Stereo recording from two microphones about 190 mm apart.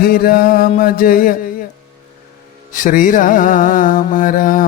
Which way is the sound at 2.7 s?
45° left (ahead or behind).